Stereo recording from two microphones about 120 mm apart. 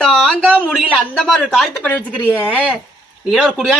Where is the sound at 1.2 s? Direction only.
5° left (ahead or behind).